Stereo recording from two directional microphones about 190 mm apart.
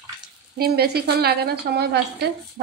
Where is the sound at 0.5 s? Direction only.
55° right (ahead or behind).